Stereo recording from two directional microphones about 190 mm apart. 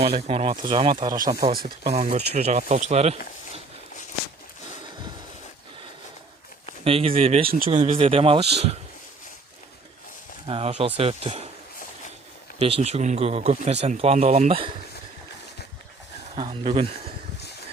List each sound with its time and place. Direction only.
0.0 s speech: 30° right (ahead or behind)
6.8 s speech: 30° right (ahead or behind)
10.4 s speech: 30° right (ahead or behind)
12.5 s speech: 30° right (ahead or behind)
16.3 s speech: 30° right (ahead or behind)